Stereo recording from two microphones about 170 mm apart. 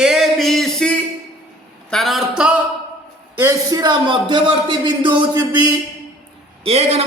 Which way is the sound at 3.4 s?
20° right (ahead or behind).